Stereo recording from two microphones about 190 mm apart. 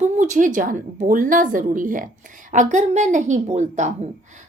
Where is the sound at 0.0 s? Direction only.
40° right (ahead or behind).